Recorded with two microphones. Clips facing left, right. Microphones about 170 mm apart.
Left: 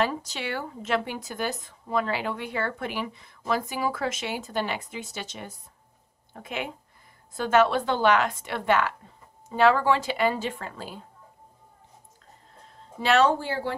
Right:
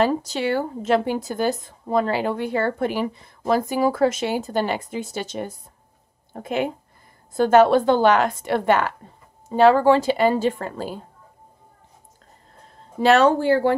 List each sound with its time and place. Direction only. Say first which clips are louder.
0.0 s speech: right 7 dB; 35° right (ahead or behind)
13.0 s speech: right 6 dB; 45° right (ahead or behind)
13.4 s speech: right 12 dB; 60° right (ahead or behind)